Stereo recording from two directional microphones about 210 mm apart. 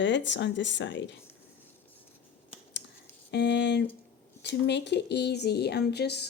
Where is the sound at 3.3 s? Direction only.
55° left (ahead or behind).